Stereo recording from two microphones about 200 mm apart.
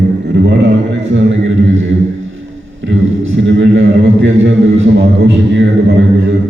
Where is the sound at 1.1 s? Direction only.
65° right (ahead or behind).